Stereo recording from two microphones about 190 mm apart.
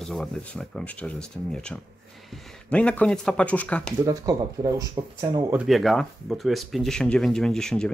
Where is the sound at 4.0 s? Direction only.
20° right (ahead or behind).